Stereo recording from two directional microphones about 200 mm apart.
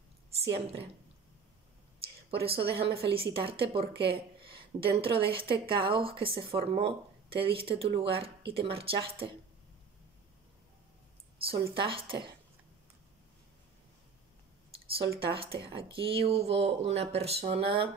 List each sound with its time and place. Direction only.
2.5 s a woman's voice: 30° right (ahead or behind)
11.5 s a woman's voice: 25° right (ahead or behind)
15.0 s a woman's voice: 25° right (ahead or behind)